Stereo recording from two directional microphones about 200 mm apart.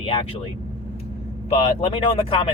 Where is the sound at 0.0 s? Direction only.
25° left (ahead or behind).